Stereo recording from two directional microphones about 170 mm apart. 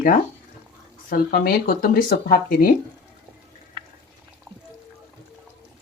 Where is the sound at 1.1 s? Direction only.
60° left (ahead or behind).